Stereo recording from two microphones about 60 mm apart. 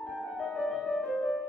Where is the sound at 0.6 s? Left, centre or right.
Centre.